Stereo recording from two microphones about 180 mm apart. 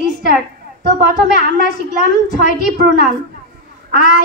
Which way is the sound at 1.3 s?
50° left (ahead or behind).